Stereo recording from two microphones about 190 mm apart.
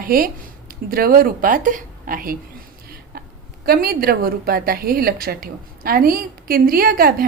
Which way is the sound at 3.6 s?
55° right (ahead or behind).